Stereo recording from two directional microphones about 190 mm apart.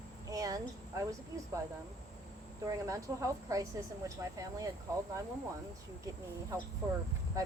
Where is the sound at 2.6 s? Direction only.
15° right (ahead or behind).